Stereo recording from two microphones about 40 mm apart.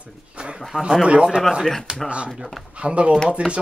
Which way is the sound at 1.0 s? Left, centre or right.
Right.